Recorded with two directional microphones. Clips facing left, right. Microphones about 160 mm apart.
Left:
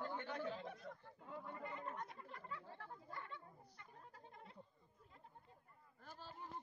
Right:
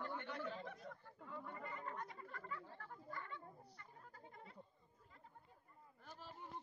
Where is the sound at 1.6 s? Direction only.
20° left (ahead or behind).